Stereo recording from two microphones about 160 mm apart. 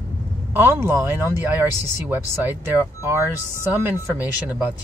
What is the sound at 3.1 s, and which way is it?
Speech, 15° right (ahead or behind).